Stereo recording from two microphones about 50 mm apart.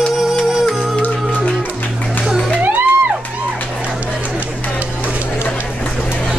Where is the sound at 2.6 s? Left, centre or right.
Right.